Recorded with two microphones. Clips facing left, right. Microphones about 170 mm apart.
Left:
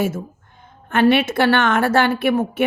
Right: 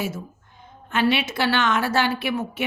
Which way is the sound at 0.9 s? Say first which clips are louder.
Left 6 dB; 55° left (ahead or behind).